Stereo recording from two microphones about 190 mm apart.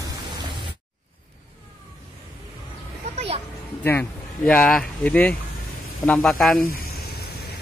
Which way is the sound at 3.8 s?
10° left (ahead or behind).